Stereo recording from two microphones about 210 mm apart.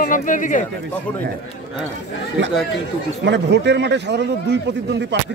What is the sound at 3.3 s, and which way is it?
A man's voice, 55° right (ahead or behind).